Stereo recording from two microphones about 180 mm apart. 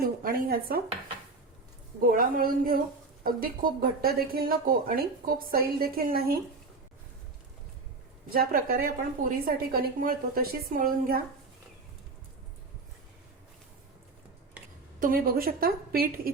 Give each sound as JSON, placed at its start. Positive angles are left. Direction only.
{"t": 0.0, "sound": "dishes", "side_deg": -55}
{"t": 2.0, "sound": "a woman's voice", "side_deg": -50}
{"t": 8.3, "sound": "a woman's voice", "side_deg": -55}
{"t": 15.0, "sound": "speech", "side_deg": -55}